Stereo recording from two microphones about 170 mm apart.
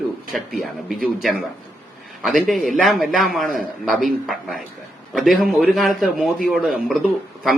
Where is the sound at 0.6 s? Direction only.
Centre (ahead or behind).